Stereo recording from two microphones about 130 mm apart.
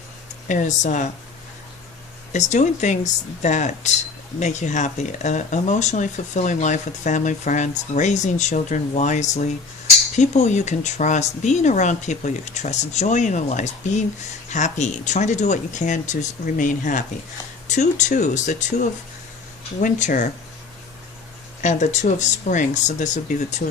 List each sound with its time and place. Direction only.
0.4 s speech: 75° left (ahead or behind)
2.3 s speech: 65° left (ahead or behind)
17.7 s speech: 65° left (ahead or behind)
21.6 s speech: 70° left (ahead or behind)